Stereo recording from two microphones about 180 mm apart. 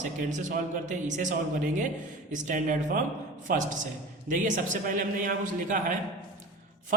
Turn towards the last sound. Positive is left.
turn(degrees=-45)  # may be behind; listen again after turning